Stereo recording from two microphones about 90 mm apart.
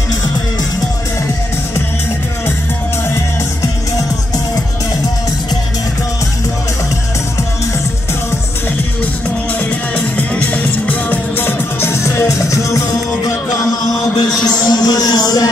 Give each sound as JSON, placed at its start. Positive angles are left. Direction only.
{"t": 9.9, "sound": "music", "side_deg": 15}